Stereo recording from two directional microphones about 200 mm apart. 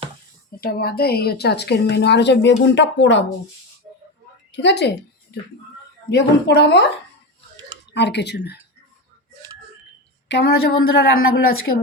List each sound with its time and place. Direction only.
0.6 s a woman's voice: 50° left (ahead or behind)
4.5 s a woman's voice: 60° left (ahead or behind)
7.9 s a woman's voice: 60° left (ahead or behind)
10.2 s a woman's voice: 60° left (ahead or behind)